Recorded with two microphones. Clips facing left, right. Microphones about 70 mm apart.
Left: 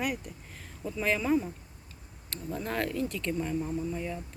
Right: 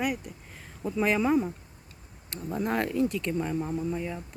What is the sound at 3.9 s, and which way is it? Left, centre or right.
Speech, centre.